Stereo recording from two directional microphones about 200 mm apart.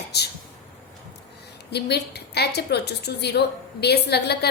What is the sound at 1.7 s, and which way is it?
A woman's voice, 55° left (ahead or behind).